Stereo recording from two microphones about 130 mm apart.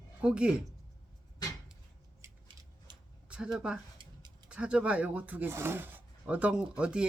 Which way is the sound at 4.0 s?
40° right (ahead or behind).